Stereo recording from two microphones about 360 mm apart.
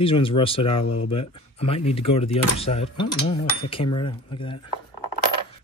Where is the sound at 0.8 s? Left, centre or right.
Left.